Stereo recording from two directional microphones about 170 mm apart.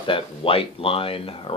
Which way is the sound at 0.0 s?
30° left (ahead or behind).